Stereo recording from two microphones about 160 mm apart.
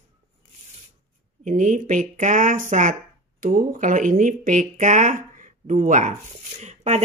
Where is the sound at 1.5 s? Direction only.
55° right (ahead or behind).